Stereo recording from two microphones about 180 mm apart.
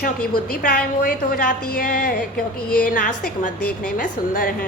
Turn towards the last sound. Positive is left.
turn(degrees=50)  # may be behind; listen again after turning